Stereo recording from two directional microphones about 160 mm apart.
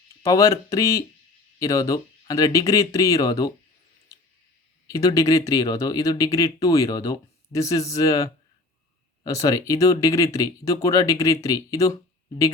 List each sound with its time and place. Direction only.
0.2 s speech: 20° left (ahead or behind)
4.9 s speech: 20° left (ahead or behind)